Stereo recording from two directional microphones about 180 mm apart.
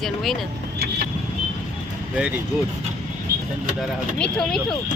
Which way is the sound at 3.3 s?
60° right (ahead or behind).